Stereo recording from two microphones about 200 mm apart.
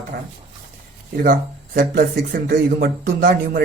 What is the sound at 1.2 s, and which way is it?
Speech, 45° right (ahead or behind).